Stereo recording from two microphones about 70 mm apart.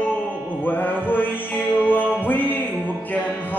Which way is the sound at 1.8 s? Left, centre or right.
Left.